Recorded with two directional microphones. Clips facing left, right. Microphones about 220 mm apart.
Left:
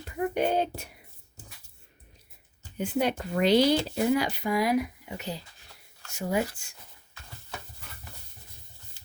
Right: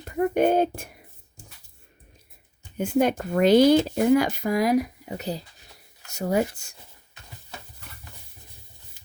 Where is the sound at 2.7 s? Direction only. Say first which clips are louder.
Right 5 dB; 50° right (ahead or behind).